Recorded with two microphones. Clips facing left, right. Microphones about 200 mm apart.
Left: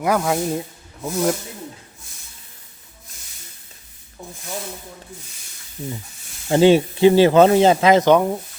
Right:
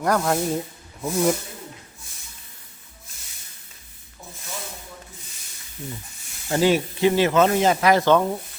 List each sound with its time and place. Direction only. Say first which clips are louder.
0.0 s speech: left 2 dB; 5° left (ahead or behind)
6.5 s speech: left 6 dB; 25° left (ahead or behind)